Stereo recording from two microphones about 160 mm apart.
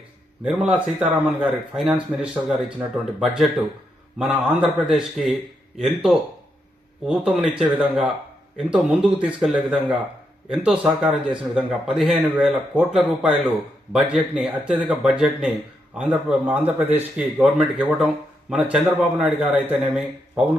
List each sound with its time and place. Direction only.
0.4 s speech: 5° right (ahead or behind)